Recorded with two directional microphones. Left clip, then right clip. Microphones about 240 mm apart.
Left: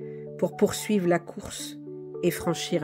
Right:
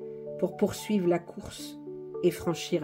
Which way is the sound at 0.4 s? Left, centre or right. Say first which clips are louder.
Left 4 dB; left.